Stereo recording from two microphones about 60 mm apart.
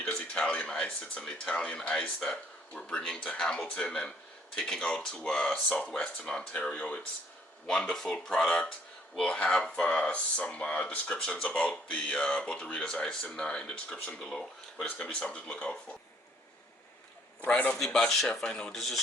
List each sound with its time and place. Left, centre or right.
0.0 s a sound: centre
1.2 s speech: centre
17.4 s speech: left
17.7 s speech: centre
18.7 s a man's voice: centre